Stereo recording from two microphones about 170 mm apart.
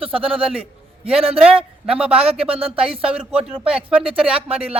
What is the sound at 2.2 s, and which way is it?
A man's voice, 35° right (ahead or behind).